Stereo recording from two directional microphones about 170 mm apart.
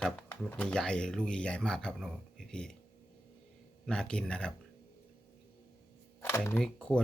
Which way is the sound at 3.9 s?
5° left (ahead or behind).